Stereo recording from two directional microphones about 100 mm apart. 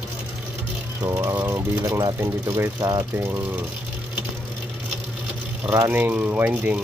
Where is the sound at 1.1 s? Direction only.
30° right (ahead or behind).